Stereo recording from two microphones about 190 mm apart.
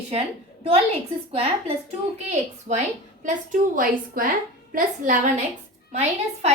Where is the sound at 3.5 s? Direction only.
45° right (ahead or behind).